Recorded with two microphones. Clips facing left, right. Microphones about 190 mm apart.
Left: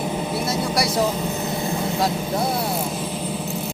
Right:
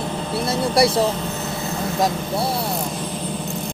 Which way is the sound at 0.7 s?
30° right (ahead or behind).